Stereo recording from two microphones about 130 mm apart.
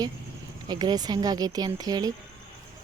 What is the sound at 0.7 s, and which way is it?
Speech, 30° right (ahead or behind).